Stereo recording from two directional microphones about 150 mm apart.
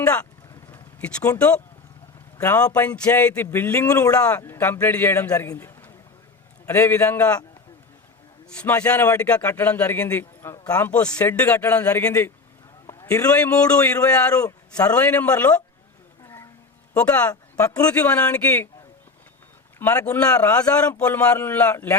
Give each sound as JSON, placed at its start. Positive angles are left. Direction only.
{"t": 0.7, "sound": "vehicle", "side_deg": 10}
{"t": 1.4, "sound": "a man's voice", "side_deg": 5}
{"t": 8.5, "sound": "a man's voice", "side_deg": 10}
{"t": 12.9, "sound": "a sound", "side_deg": 20}
{"t": 13.3, "sound": "a man's voice", "side_deg": 10}
{"t": 14.4, "sound": "a man's voice", "side_deg": 25}
{"t": 14.9, "sound": "a man's voice", "side_deg": 10}
{"t": 16.2, "sound": "a sound", "side_deg": 15}
{"t": 16.9, "sound": "speech", "side_deg": 10}
{"t": 17.7, "sound": "speech", "side_deg": 25}
{"t": 17.9, "sound": "a man's voice", "side_deg": 10}
{"t": 20.1, "sound": "a man's voice", "side_deg": 10}